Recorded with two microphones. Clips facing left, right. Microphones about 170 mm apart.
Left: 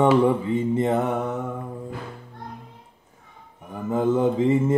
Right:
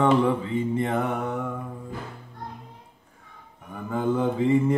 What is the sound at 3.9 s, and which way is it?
Mantra, 30° left (ahead or behind).